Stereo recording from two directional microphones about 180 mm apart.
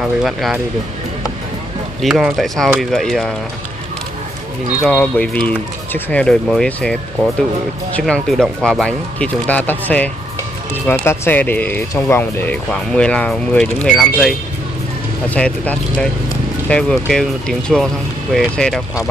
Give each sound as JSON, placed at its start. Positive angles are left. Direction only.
{"t": 0.0, "sound": "speech", "side_deg": 0}
{"t": 2.0, "sound": "speech", "side_deg": 0}
{"t": 4.8, "sound": "speech", "side_deg": 5}